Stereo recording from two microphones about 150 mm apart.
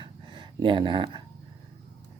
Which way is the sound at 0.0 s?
35° right (ahead or behind).